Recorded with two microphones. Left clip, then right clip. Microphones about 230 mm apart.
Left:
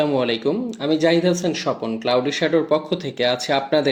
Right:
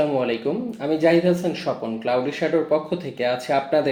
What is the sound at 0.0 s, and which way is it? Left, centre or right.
Speech, left.